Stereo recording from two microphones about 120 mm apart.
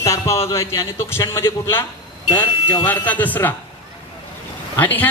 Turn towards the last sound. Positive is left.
turn(degrees=15)  # may be behind; listen again after turning